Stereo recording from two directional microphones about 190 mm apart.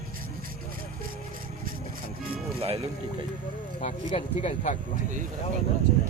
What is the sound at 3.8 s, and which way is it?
Speech, 35° left (ahead or behind).